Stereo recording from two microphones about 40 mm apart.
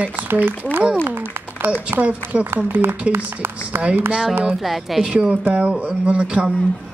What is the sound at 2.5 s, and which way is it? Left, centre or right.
Speech, right.